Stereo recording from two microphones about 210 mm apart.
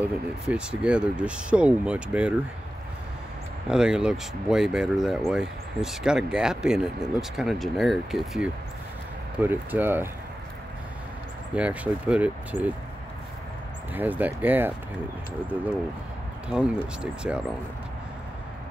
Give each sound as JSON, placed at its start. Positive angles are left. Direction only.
{"t": 0.0, "sound": "speech", "side_deg": -5}
{"t": 3.6, "sound": "speech", "side_deg": -5}
{"t": 11.5, "sound": "speech", "side_deg": -5}
{"t": 13.9, "sound": "speech", "side_deg": -10}
{"t": 16.4, "sound": "speech", "side_deg": -5}